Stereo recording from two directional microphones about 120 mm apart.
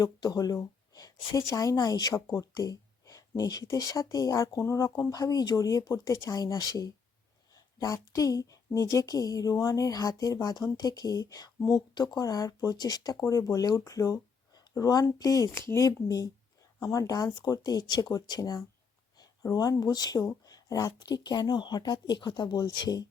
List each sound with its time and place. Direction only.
0.0 s a woman's voice: 30° left (ahead or behind)